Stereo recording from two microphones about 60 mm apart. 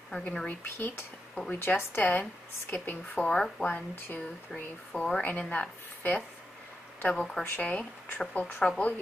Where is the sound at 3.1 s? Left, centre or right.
Centre.